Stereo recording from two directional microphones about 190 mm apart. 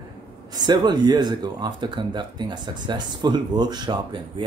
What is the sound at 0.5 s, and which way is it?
Speech, 20° right (ahead or behind).